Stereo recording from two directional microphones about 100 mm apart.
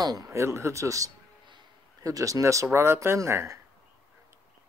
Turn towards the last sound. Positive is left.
turn(degrees=-30)  # may be behind; listen again after turning